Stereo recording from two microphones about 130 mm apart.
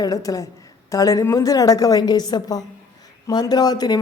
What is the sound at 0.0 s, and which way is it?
A woman's voice, 25° left (ahead or behind).